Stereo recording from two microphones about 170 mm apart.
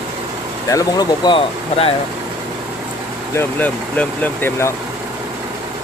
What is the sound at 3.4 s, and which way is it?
Speech, 10° left (ahead or behind).